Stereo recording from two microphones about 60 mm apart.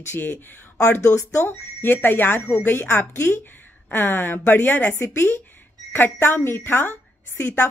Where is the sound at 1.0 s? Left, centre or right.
Left.